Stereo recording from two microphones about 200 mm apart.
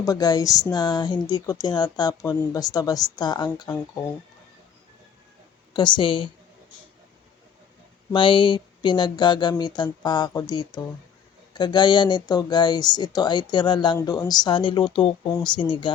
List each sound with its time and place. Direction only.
0.0 s speech: 20° left (ahead or behind)
5.7 s speech: 25° left (ahead or behind)
8.1 s speech: 25° left (ahead or behind)